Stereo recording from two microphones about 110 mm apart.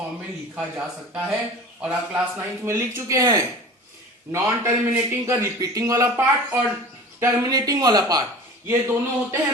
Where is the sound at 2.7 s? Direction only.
25° right (ahead or behind).